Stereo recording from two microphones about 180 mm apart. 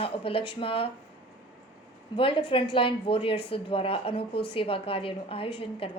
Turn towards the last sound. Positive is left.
turn(degrees=30)  # may be behind; listen again after turning